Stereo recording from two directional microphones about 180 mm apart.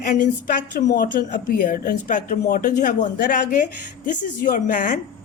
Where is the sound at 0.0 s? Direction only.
45° left (ahead or behind).